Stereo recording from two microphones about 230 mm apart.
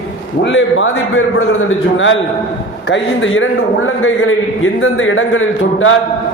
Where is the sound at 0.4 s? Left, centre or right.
Left.